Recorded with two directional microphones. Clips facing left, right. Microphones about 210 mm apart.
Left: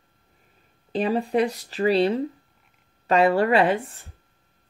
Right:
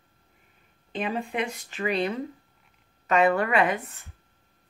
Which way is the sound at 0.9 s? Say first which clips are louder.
Left 7 dB; 35° left (ahead or behind).